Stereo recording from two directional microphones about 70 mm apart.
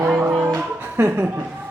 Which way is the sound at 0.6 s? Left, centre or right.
Right.